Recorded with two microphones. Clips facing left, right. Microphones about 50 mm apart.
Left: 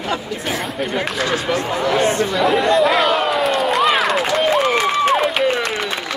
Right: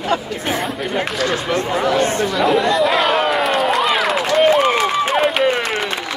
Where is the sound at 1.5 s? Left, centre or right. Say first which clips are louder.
Right 1 dB; right.